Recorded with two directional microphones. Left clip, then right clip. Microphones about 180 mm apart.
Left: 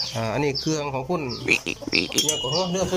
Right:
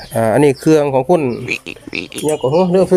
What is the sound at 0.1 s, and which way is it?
Speech, 45° right (ahead or behind).